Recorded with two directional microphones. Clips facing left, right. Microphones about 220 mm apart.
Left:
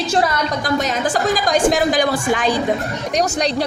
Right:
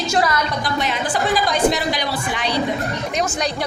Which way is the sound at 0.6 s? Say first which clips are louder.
Left 4 dB; 45° left (ahead or behind).